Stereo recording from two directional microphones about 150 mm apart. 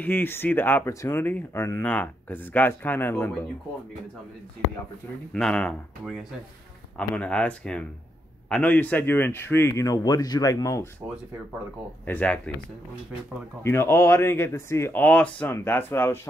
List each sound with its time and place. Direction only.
0.0 s speech: 15° left (ahead or behind)
5.3 s speech: 5° left (ahead or behind); by 10.9 s 20° left (ahead or behind)
12.1 s speech: 10° left (ahead or behind)
13.6 s speech: 15° left (ahead or behind)